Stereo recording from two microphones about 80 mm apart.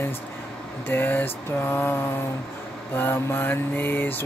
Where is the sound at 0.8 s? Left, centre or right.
Left.